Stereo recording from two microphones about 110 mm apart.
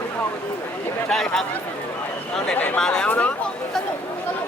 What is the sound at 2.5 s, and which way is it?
Speech, 10° left (ahead or behind).